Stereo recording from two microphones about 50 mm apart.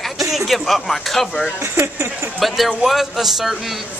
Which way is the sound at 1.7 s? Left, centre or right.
Right.